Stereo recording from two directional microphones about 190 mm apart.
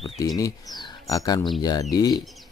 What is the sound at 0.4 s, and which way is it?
Speech, 20° left (ahead or behind).